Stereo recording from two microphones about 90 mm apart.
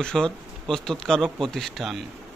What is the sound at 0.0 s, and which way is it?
Speech, 10° left (ahead or behind).